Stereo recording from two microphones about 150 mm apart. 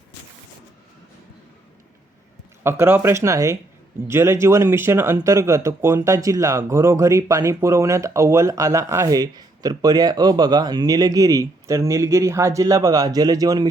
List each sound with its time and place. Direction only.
2.6 s speech: 15° right (ahead or behind)